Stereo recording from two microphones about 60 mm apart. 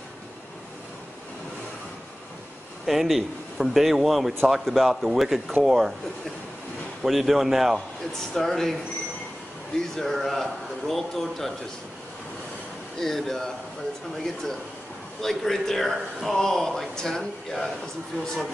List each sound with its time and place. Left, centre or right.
2.9 s speech: centre
7.0 s speech: centre
9.8 s speech: centre
13.0 s speech: centre